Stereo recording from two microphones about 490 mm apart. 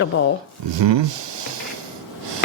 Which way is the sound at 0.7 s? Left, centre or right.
Right.